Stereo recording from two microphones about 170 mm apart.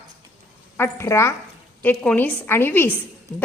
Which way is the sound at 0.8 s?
15° left (ahead or behind).